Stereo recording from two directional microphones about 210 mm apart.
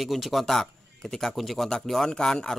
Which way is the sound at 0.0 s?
Centre (ahead or behind).